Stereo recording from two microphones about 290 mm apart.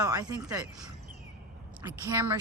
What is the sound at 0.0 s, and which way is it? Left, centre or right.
Speech, centre.